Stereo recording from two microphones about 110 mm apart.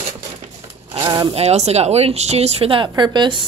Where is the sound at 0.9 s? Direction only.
45° right (ahead or behind).